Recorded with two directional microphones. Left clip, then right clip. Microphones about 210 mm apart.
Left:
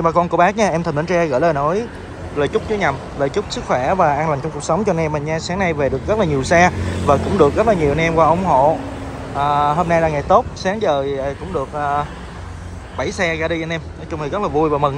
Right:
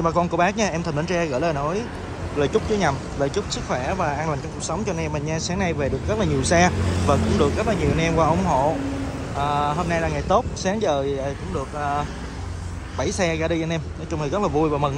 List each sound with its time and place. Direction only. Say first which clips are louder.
0.0 s speech: left 6 dB; 10° right (ahead or behind)